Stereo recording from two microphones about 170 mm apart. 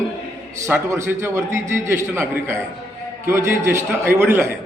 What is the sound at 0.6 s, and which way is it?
A man's voice, 15° right (ahead or behind).